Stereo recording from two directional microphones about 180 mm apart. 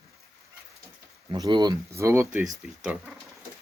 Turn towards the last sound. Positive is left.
turn(degrees=-5)  # may be behind; listen again after turning